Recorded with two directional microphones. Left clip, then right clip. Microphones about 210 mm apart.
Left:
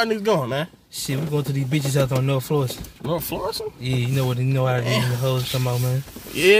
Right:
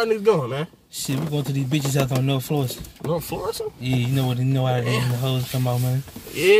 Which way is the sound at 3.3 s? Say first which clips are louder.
Left 2 dB; 20° left (ahead or behind).